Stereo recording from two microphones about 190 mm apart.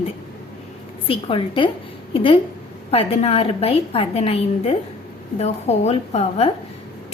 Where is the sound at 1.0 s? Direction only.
30° left (ahead or behind).